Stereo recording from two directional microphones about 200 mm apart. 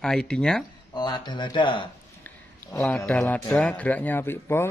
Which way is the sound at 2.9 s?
10° left (ahead or behind).